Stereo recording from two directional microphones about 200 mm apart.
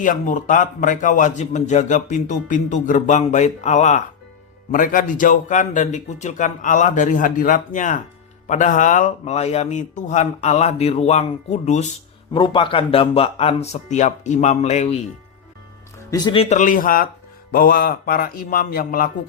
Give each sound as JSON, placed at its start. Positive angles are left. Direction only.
{"t": 0.0, "sound": "a man's voice", "side_deg": 40}
{"t": 12.3, "sound": "a man's voice", "side_deg": 25}
{"t": 16.0, "sound": "a man's voice", "side_deg": 20}